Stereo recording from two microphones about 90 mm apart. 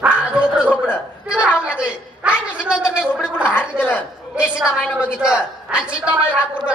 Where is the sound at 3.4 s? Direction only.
20° left (ahead or behind).